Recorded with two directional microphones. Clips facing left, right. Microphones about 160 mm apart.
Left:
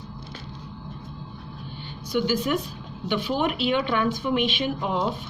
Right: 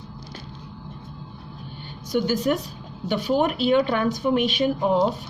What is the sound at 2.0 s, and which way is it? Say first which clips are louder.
A woman's voice: right 2 dB; 45° right (ahead or behind).